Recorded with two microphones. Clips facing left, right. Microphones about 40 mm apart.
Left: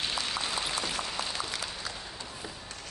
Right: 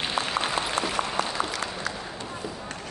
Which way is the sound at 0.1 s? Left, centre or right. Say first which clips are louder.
Right 6 dB; right.